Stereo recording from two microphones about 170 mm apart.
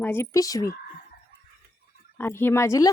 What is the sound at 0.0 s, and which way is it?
Speech, 15° left (ahead or behind).